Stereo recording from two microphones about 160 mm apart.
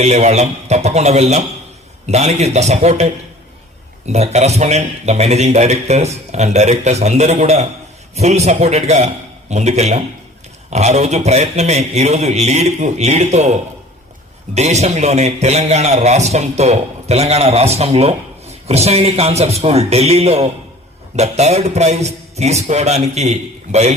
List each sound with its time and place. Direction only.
0.0 s a man's voice: 45° right (ahead or behind)